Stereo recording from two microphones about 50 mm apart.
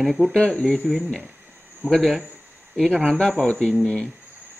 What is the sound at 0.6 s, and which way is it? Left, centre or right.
Speech, centre.